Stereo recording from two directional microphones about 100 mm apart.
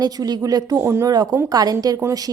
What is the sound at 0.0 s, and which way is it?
A woman's voice, 40° right (ahead or behind).